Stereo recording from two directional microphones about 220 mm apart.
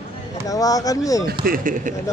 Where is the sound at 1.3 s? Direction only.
40° right (ahead or behind).